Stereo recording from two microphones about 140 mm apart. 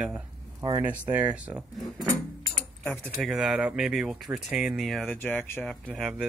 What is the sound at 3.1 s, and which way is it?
Speech, centre (ahead or behind).